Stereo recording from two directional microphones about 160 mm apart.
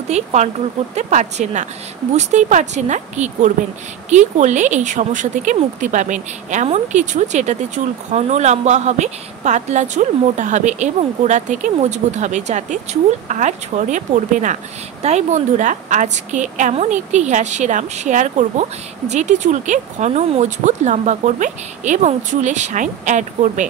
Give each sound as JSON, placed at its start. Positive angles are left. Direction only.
{"t": 0.1, "sound": "a woman's voice", "side_deg": -45}